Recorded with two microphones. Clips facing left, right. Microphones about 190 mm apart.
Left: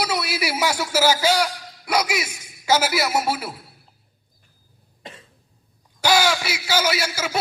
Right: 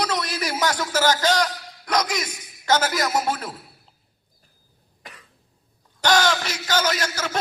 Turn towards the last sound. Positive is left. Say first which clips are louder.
# left 1 dB
turn(degrees=10)  # may be behind; listen again after turning